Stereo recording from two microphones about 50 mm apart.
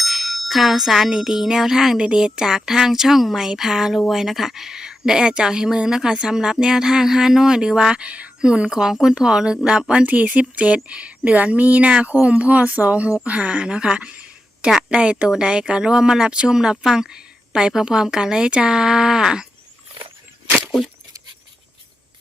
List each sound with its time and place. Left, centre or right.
0.0 s speech: centre
10.1 s speech: right; by 19.5 s centre